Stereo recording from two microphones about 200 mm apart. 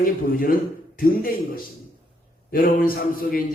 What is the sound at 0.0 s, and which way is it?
Speech, 45° left (ahead or behind).